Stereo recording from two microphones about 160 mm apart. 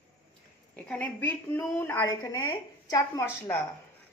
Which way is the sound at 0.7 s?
5° left (ahead or behind).